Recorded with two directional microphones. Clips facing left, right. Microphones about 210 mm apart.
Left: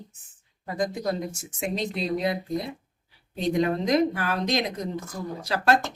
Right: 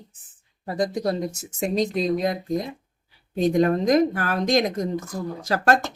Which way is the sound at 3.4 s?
45° right (ahead or behind).